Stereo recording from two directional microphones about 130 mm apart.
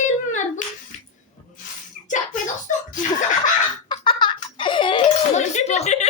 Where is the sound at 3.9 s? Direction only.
40° left (ahead or behind).